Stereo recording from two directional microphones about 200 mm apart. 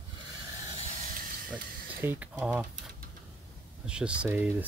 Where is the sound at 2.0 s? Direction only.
10° right (ahead or behind).